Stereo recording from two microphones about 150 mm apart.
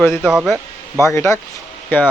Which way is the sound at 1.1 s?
20° left (ahead or behind).